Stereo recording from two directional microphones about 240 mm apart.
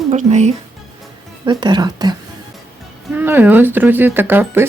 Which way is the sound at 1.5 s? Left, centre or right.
Centre.